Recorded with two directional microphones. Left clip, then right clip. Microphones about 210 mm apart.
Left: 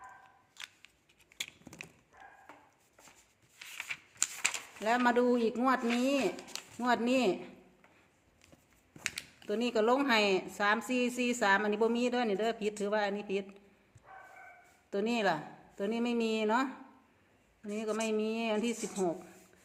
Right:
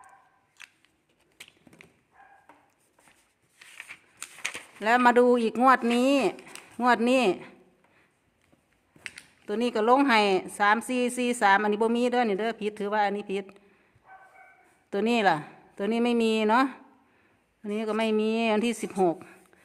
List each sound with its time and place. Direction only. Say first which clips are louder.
0.5 s a sound: left 1 dB; centre (ahead or behind)
3.6 s scissors: left 3 dB; 5° left (ahead or behind)
4.8 s a woman's voice: right 8 dB; 40° right (ahead or behind)
9.5 s a woman's voice: right 6 dB; 40° right (ahead or behind)
14.8 s a woman's voice: right 8 dB; 45° right (ahead or behind)